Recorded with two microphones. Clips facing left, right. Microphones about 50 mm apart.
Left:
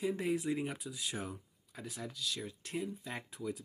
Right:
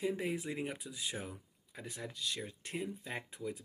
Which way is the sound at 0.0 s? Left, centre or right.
Centre.